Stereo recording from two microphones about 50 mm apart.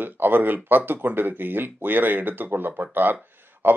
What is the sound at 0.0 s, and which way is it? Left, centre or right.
Speech, right.